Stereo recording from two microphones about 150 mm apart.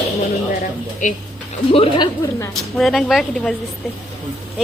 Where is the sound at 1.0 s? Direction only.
60° left (ahead or behind).